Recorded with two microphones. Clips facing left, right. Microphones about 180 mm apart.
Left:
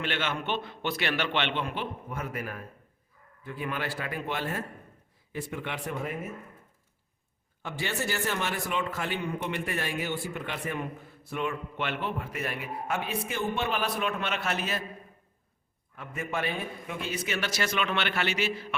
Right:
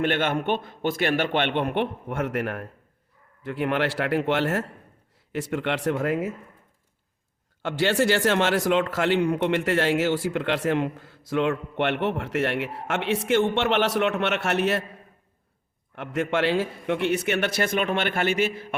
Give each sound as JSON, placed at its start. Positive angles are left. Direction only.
{"t": 0.0, "sound": "a man's voice", "side_deg": -50}
{"t": 7.6, "sound": "a man's voice", "side_deg": -85}
{"t": 16.0, "sound": "a man's voice", "side_deg": -85}